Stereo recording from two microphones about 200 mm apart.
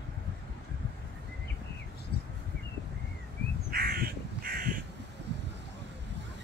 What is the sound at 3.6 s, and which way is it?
Crow, 50° right (ahead or behind).